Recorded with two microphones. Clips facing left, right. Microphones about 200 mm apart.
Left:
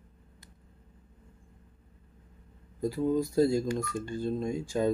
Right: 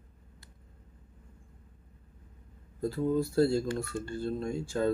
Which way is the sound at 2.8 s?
15° left (ahead or behind).